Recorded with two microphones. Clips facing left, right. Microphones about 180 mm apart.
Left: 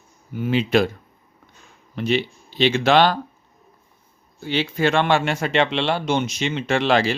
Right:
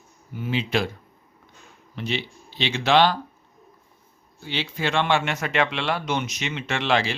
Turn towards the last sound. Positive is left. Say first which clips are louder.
# left 5 dB
turn(degrees=40)  # may be behind; listen again after turning